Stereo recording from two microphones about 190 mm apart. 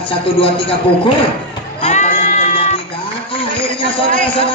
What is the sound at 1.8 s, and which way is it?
Sheep, 40° left (ahead or behind).